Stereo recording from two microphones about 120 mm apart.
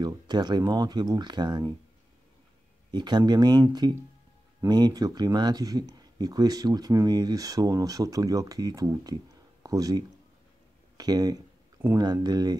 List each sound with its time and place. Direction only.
0.0 s speech: 35° right (ahead or behind)
2.9 s speech: 40° right (ahead or behind)
4.6 s speech: 35° right (ahead or behind)